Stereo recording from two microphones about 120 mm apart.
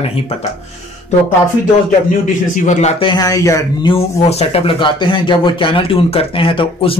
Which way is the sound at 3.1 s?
30° left (ahead or behind).